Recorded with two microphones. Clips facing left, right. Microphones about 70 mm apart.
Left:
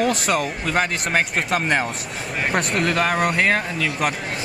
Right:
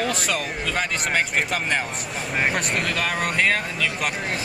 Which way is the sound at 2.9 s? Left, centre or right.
Left.